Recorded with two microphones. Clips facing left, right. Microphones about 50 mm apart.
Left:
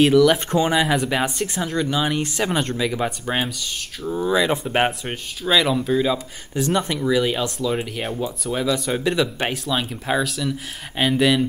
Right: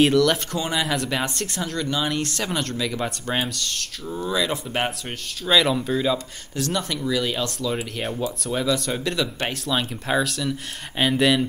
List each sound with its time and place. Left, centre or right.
0.0 s speech: centre
0.5 s speech: left
5.4 s speech: centre
6.6 s speech: left
9.7 s speech: centre